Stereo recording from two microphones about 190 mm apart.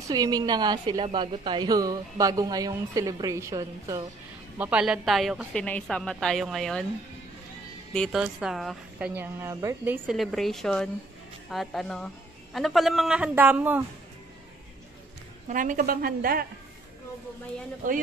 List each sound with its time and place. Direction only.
0.1 s a woman's voice: 20° right (ahead or behind)
4.6 s a woman's voice: 5° right (ahead or behind)
7.9 s a woman's voice: centre (ahead or behind); by 9.9 s 15° right (ahead or behind)
10.0 s a woman's voice: centre (ahead or behind)
15.4 s a woman's voice: 45° right (ahead or behind)